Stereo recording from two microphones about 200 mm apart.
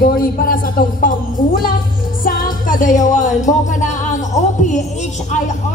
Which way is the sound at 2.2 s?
45° left (ahead or behind).